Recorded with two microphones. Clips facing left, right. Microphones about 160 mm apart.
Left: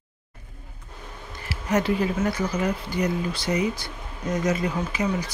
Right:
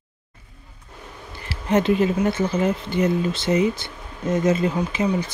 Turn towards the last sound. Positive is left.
turn(degrees=-25)  # may be behind; listen again after turning